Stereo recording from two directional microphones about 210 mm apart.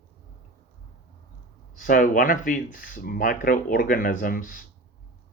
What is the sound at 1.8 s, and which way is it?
Speech, 40° left (ahead or behind).